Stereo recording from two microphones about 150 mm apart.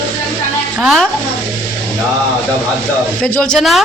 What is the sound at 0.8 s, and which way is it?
Speech, centre (ahead or behind).